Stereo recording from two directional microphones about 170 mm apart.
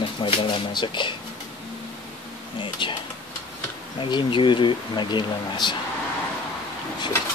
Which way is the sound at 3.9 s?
30° left (ahead or behind).